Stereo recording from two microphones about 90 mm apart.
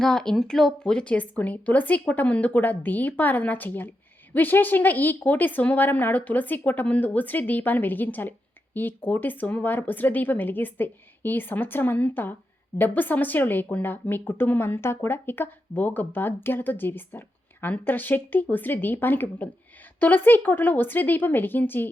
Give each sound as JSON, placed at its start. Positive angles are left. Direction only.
{"t": 0.0, "sound": "a woman's voice", "side_deg": 5}